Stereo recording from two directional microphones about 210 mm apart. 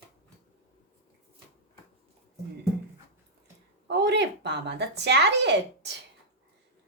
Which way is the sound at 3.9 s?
55° right (ahead or behind).